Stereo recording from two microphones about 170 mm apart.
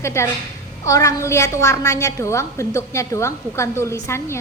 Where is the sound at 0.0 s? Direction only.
15° left (ahead or behind).